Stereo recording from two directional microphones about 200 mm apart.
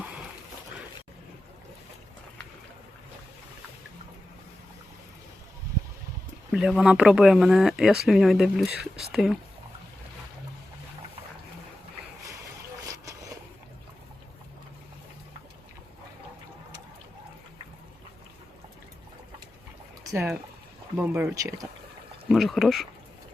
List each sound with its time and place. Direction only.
6.5 s speech: 5° right (ahead or behind)
12.8 s vehicle: 15° right (ahead or behind)
20.9 s speech: 10° right (ahead or behind)